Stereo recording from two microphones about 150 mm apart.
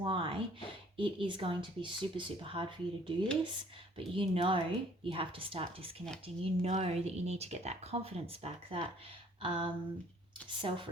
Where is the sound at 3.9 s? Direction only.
35° right (ahead or behind).